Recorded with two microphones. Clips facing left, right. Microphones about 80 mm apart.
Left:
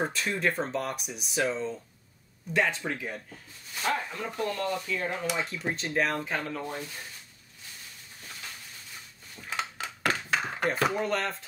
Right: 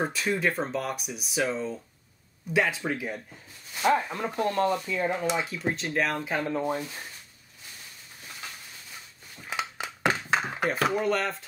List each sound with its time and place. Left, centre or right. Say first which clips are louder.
0.0 s speech: right 2 dB; centre
4.1 s speech: right 4 dB; right
5.4 s speech: right 2 dB; centre
6.4 s speech: right 7 dB; right
9.5 s a sound: right 1 dB; centre
10.6 s speech: even; centre